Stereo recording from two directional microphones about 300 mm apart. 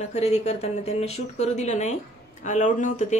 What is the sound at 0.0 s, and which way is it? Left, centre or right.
Speech, left.